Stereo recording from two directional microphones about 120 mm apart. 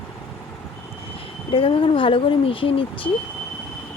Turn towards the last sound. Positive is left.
turn(degrees=45)  # may be behind; listen again after turning